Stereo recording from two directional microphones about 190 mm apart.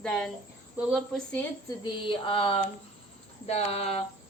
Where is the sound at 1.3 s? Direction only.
10° left (ahead or behind).